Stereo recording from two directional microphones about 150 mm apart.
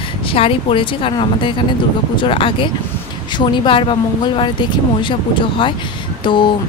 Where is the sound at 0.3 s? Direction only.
40° left (ahead or behind).